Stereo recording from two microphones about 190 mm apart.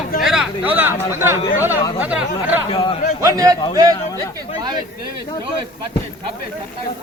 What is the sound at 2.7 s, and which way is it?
Speech, 30° left (ahead or behind).